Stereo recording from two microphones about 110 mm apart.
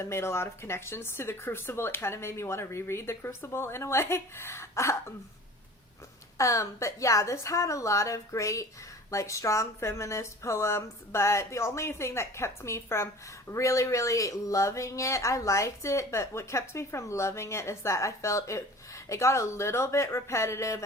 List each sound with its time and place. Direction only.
0.0 s speech: 25° left (ahead or behind)
6.3 s speech: 30° left (ahead or behind)